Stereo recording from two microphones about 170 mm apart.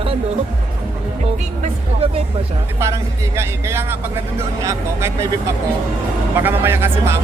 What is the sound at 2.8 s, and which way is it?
Speech, 15° right (ahead or behind).